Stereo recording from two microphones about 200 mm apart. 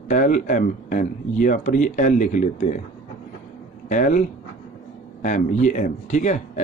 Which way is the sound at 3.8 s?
40° left (ahead or behind).